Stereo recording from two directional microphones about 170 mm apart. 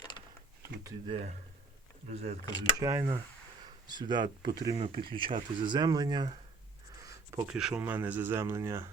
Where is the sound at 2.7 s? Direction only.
20° right (ahead or behind).